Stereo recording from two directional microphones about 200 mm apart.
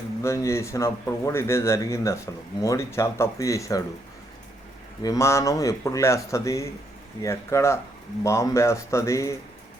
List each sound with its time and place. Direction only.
0.2 s a man's voice: 15° left (ahead or behind)
5.0 s a man's voice: 15° left (ahead or behind)